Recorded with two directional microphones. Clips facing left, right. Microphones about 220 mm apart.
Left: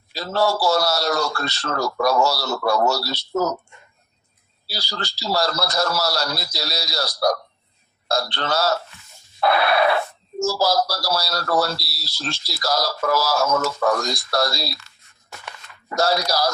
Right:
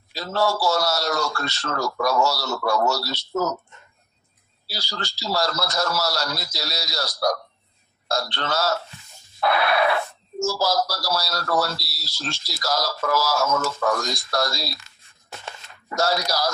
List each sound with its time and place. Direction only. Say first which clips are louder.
0.1 s speech: left 2 dB; 35° left (ahead or behind)
4.7 s speech: left 2 dB; 35° left (ahead or behind)
9.4 s a sound: left 2 dB; 35° left (ahead or behind)
10.4 s speech: left 2 dB; 35° left (ahead or behind)
16.3 s speech: left 3 dB; 35° left (ahead or behind)